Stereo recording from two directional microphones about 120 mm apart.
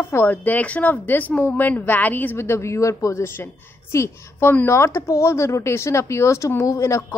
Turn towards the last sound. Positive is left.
turn(degrees=30)  # may be behind; listen again after turning